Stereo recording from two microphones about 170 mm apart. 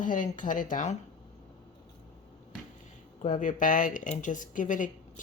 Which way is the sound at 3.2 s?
50° left (ahead or behind).